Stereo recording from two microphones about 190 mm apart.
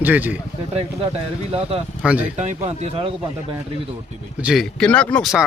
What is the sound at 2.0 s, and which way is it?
Speech, 5° right (ahead or behind).